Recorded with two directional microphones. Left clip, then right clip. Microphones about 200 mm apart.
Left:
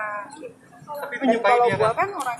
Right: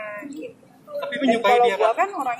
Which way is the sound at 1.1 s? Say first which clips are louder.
Even; 45° right (ahead or behind).